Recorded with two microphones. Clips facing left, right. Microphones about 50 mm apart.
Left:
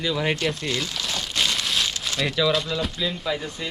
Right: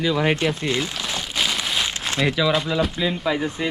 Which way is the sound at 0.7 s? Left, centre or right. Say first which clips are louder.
Right 3 dB; centre.